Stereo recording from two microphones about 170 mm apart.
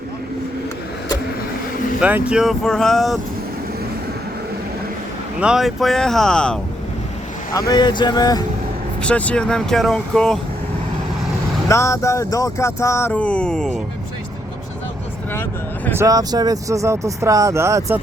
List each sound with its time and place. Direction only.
2.0 s speech: 10° right (ahead or behind)
5.4 s speech: 5° right (ahead or behind)
7.7 s vehicle: 25° left (ahead or behind)
9.0 s speech: 5° left (ahead or behind)
11.7 s speech: 15° left (ahead or behind)
15.3 s speech: 10° left (ahead or behind)
16.0 s speech: 20° right (ahead or behind)